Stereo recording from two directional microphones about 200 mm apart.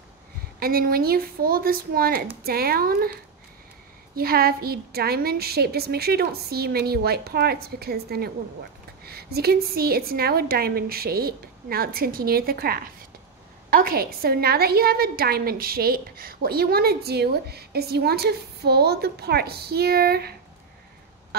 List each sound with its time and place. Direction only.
0.6 s a woman's voice: 50° right (ahead or behind)
4.1 s a woman's voice: 50° right (ahead or behind)